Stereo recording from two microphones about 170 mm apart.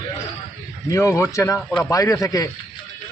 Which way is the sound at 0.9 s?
15° left (ahead or behind).